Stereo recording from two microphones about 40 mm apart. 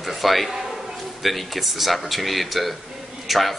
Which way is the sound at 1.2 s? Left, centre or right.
Centre.